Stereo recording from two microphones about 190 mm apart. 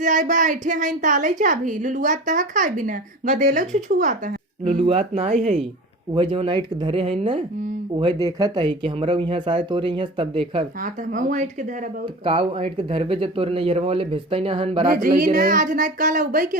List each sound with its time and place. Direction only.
0.0 s a woman's voice: 40° right (ahead or behind)
11.1 s speech: 40° right (ahead or behind)
12.2 s speech: 30° right (ahead or behind)
14.8 s a woman's voice: 50° right (ahead or behind)